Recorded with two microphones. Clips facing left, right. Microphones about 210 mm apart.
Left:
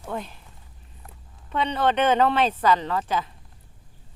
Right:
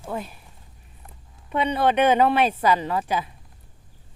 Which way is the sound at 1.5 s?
10° right (ahead or behind).